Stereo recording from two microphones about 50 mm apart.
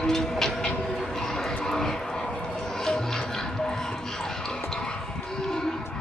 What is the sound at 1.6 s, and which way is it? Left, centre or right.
Vehicle, centre.